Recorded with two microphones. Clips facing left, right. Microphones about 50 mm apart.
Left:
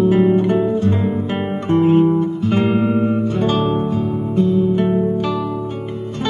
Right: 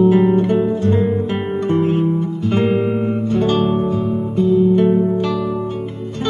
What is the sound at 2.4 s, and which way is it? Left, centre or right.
Music, centre.